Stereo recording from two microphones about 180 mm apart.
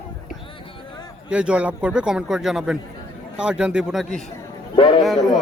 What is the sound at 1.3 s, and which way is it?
A man's voice, 5° right (ahead or behind).